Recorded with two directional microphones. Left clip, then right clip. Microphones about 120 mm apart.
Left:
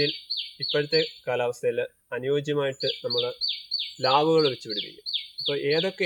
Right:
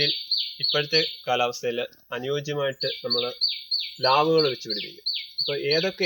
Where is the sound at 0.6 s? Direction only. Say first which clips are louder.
Even; 15° left (ahead or behind).